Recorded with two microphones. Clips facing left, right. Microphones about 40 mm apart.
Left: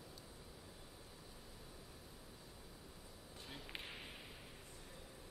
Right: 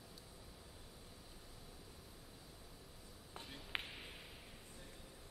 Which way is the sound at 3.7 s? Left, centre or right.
Right.